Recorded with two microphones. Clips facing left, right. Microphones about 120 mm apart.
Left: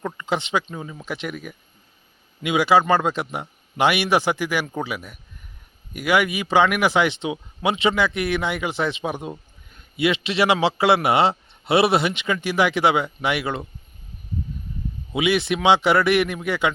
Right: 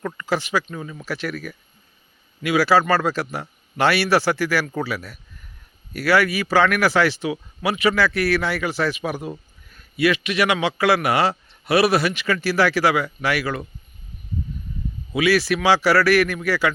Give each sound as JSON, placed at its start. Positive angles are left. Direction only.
{"t": 0.0, "sound": "speech", "side_deg": 20}
{"t": 15.1, "sound": "speech", "side_deg": 20}